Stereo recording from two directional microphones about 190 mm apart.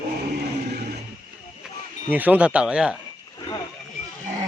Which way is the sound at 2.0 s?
10° right (ahead or behind).